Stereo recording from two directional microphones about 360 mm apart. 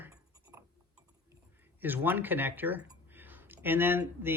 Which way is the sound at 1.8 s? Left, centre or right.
Centre.